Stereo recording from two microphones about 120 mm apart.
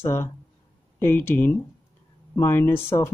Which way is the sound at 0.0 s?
20° left (ahead or behind).